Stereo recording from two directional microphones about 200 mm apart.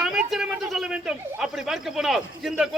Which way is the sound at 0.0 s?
5° right (ahead or behind).